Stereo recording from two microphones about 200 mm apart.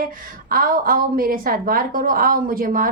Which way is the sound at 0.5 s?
45° right (ahead or behind).